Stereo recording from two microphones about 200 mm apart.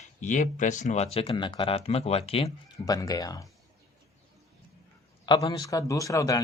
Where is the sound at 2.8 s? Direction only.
20° left (ahead or behind).